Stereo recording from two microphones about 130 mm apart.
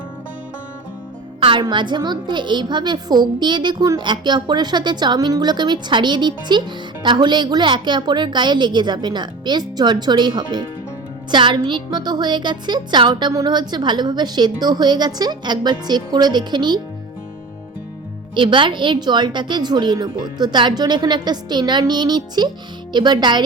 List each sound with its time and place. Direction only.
1.4 s a woman's voice: 40° right (ahead or behind)
18.3 s a woman's voice: 40° right (ahead or behind)